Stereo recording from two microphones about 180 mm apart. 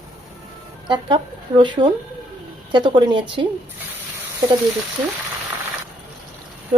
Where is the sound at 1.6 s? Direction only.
25° right (ahead or behind).